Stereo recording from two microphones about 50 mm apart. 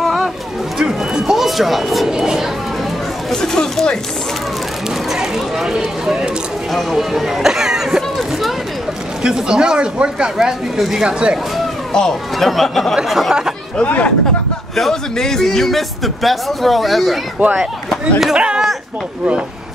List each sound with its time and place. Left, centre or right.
0.0 s a sound: centre
0.7 s a sound: centre
2.0 s speech: centre
3.3 s speech: centre
5.1 s speech: centre
8.2 s a sound: centre
9.2 s speech: centre
11.9 s speech: centre
12.9 s speech: centre
13.8 s speech: left
14.8 s a man's voice: centre
18.3 s speech: centre